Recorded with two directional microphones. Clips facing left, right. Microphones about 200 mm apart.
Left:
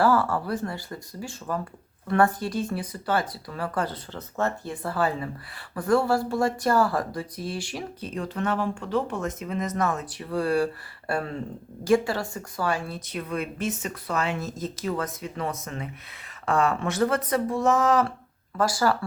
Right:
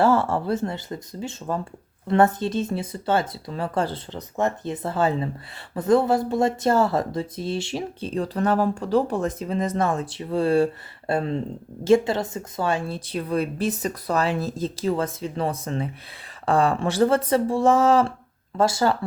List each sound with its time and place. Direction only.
0.0 s a woman's voice: 25° right (ahead or behind)